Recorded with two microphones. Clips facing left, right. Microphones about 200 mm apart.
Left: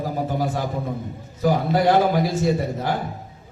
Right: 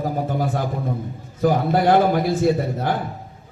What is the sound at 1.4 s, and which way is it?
A man's voice, 50° right (ahead or behind).